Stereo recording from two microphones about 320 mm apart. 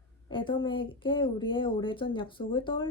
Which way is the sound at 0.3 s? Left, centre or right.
Centre.